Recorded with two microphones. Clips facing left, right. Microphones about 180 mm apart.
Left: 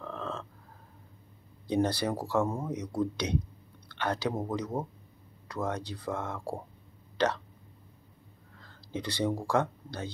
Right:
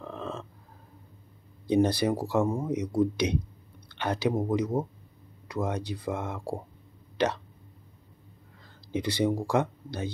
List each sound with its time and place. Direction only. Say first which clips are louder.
0.0 s a sound: right 1 dB; 15° right (ahead or behind)
1.7 s speech: right 4 dB; 15° right (ahead or behind)
8.6 s speech: right 6 dB; 15° right (ahead or behind)